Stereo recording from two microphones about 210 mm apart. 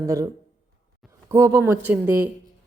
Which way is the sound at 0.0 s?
15° right (ahead or behind).